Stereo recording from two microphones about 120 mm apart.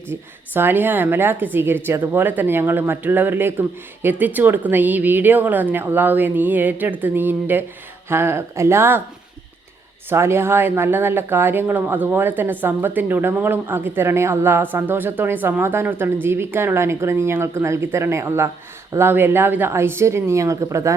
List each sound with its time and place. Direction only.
0.1 s speech: 20° right (ahead or behind)
10.1 s speech: 20° right (ahead or behind)